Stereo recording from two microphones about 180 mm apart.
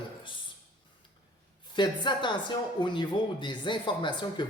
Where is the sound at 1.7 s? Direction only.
25° left (ahead or behind).